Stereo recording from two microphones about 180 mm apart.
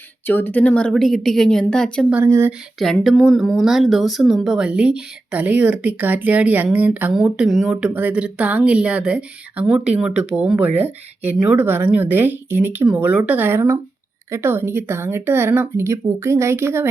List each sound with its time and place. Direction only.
0.3 s speech: 10° left (ahead or behind)
2.1 s speech: 15° right (ahead or behind)
2.7 s speech: centre (ahead or behind)